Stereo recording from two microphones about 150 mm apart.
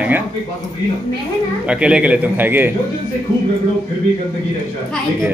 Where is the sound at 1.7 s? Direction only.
5° right (ahead or behind).